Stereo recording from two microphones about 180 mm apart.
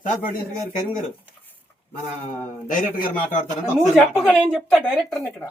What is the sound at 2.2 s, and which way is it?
Speech, 45° left (ahead or behind).